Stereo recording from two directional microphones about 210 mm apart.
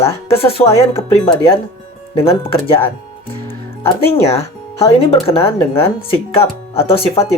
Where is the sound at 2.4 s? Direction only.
25° left (ahead or behind).